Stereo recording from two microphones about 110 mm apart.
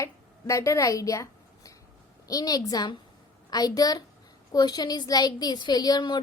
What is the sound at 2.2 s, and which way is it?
A woman's voice, 35° left (ahead or behind).